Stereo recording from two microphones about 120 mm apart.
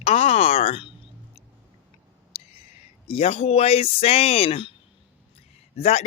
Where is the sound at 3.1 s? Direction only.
55° left (ahead or behind).